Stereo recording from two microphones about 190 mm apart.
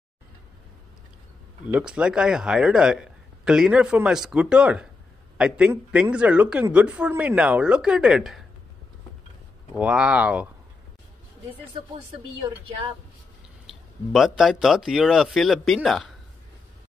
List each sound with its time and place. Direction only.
1.7 s a woman's voice: 5° right (ahead or behind)
9.8 s a woman's voice: 5° right (ahead or behind)
13.7 s speech: centre (ahead or behind)